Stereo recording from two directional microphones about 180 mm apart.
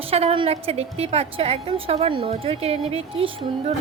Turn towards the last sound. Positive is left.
turn(degrees=-35)  # may be behind; listen again after turning